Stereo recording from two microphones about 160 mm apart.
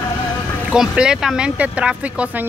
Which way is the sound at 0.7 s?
5° right (ahead or behind).